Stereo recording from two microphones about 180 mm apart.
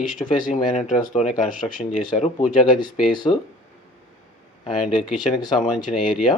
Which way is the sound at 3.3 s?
30° left (ahead or behind).